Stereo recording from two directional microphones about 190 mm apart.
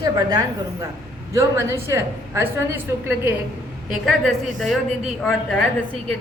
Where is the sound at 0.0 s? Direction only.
20° right (ahead or behind).